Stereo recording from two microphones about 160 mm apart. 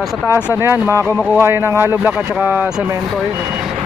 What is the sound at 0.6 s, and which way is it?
Speech, 15° right (ahead or behind).